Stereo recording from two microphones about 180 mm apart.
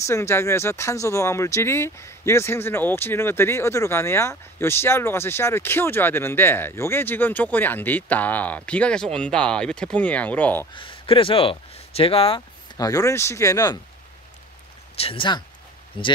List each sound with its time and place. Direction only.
0.0 s speech: 15° left (ahead or behind)
10.7 s speech: 30° left (ahead or behind)
12.7 s speech: 20° left (ahead or behind)
15.0 s speech: 30° left (ahead or behind)